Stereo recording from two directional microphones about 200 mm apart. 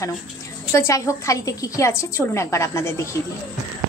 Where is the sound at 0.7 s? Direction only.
15° left (ahead or behind).